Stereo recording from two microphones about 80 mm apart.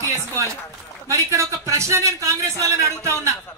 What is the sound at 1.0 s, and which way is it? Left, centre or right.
A man's voice, right.